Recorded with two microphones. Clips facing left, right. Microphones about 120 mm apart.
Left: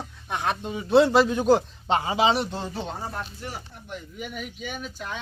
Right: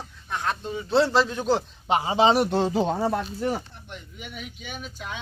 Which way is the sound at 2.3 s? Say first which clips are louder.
Right 6 dB; 60° right (ahead or behind).